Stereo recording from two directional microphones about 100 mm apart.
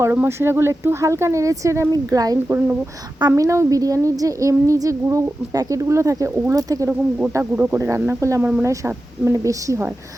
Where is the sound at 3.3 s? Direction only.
30° right (ahead or behind).